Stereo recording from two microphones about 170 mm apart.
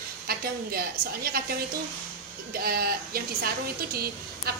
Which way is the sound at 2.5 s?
60° right (ahead or behind).